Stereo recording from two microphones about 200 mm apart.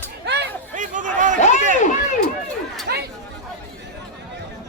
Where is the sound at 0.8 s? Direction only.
40° right (ahead or behind).